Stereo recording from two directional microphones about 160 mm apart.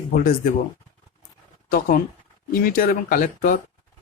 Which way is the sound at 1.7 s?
65° left (ahead or behind).